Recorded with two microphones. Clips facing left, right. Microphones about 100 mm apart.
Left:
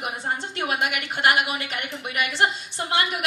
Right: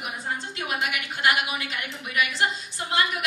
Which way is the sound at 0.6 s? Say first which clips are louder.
Left 4 dB; 60° left (ahead or behind).